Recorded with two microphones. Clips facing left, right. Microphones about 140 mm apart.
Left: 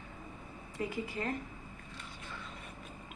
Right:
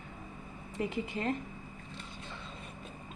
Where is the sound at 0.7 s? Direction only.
25° right (ahead or behind).